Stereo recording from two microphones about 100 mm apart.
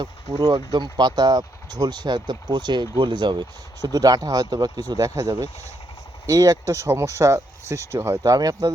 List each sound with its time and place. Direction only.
0.0 s speech: 45° right (ahead or behind); by 8.2 s 25° right (ahead or behind)
8.2 s speech: 40° right (ahead or behind)